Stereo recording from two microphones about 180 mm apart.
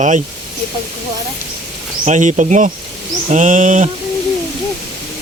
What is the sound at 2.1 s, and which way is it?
Speech, 45° right (ahead or behind).